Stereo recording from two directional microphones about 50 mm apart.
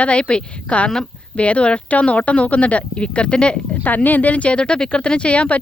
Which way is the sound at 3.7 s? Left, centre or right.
Left.